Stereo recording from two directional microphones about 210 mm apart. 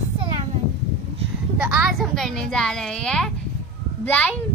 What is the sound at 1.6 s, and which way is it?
A woman's voice, centre (ahead or behind).